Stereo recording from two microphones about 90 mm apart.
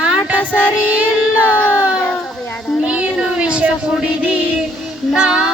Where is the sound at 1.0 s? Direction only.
15° right (ahead or behind).